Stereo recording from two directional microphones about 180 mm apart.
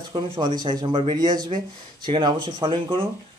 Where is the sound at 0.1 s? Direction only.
25° right (ahead or behind).